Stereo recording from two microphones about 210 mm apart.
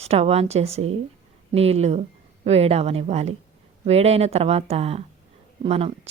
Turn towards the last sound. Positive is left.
turn(degrees=-30)  # may be behind; listen again after turning